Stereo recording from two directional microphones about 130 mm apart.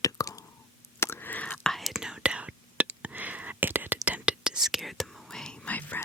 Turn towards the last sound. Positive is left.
turn(degrees=10)  # may be behind; listen again after turning